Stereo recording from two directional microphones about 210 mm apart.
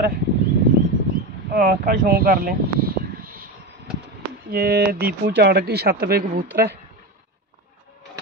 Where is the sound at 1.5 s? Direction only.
45° right (ahead or behind).